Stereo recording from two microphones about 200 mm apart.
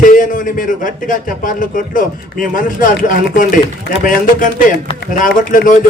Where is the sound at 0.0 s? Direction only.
40° left (ahead or behind).